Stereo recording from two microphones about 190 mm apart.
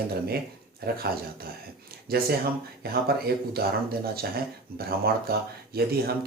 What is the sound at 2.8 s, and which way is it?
Speech, 55° right (ahead or behind).